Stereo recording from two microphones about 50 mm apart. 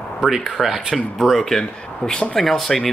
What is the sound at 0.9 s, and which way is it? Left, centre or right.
Speech, centre.